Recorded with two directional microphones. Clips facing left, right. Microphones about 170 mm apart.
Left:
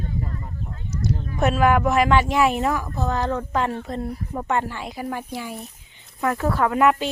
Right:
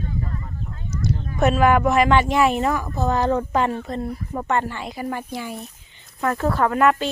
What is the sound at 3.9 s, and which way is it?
Speech, 5° left (ahead or behind).